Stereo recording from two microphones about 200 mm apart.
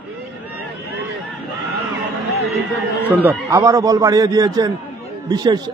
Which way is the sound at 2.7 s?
10° right (ahead or behind).